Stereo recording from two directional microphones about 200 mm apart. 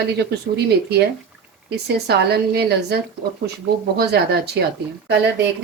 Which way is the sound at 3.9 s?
55° right (ahead or behind).